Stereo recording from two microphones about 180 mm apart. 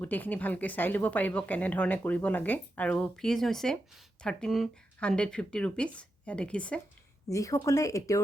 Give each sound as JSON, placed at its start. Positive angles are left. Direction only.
{"t": 0.0, "sound": "speech", "side_deg": 10}
{"t": 7.3, "sound": "speech", "side_deg": 15}